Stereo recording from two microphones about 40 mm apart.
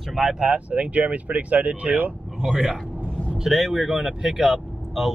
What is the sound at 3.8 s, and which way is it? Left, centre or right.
Speech, right.